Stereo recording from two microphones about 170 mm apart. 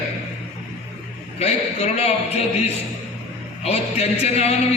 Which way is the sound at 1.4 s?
40° left (ahead or behind).